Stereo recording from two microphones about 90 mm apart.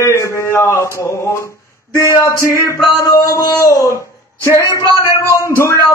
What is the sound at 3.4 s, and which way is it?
Speech, 45° left (ahead or behind).